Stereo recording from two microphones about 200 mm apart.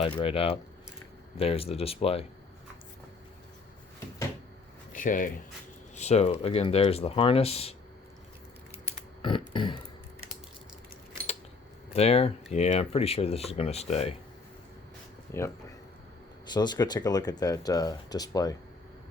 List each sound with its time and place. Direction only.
0.0 s speech: 30° left (ahead or behind)
4.9 s speech: 40° left (ahead or behind)
9.5 s speech: 25° left (ahead or behind)
11.9 s speech: 30° left (ahead or behind)
15.3 s speech: 10° left (ahead or behind)